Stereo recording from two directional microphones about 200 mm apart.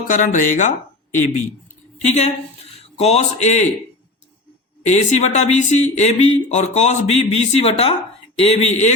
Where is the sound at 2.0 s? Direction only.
35° left (ahead or behind).